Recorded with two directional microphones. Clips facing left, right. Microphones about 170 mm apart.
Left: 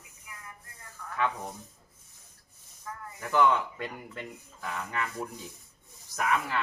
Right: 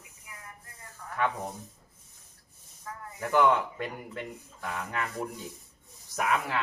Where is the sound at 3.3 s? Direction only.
Centre (ahead or behind).